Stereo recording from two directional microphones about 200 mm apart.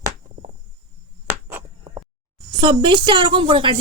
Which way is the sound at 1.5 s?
20° right (ahead or behind).